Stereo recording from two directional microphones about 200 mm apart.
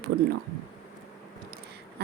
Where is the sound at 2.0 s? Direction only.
55° right (ahead or behind).